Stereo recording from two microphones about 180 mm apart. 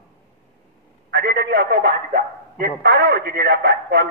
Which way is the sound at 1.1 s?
65° right (ahead or behind).